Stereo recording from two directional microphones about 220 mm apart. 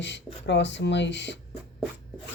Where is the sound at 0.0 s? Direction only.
55° left (ahead or behind).